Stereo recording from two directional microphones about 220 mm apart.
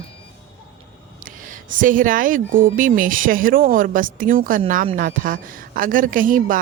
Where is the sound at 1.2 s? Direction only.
35° right (ahead or behind).